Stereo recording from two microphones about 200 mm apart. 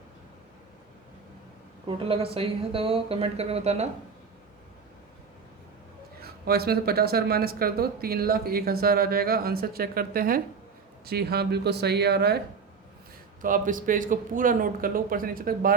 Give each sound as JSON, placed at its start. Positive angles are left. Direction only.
{"t": 2.0, "sound": "speech", "side_deg": -25}
{"t": 6.2, "sound": "speech", "side_deg": -50}
{"t": 13.4, "sound": "speech", "side_deg": -40}